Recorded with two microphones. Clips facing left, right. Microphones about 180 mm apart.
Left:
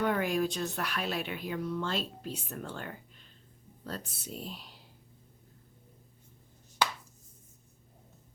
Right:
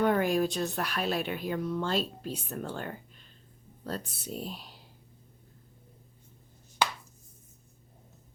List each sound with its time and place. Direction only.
0.0 s a woman's voice: 40° right (ahead or behind)